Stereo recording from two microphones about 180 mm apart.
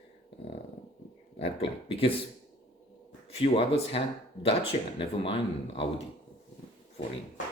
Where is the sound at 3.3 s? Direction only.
30° left (ahead or behind).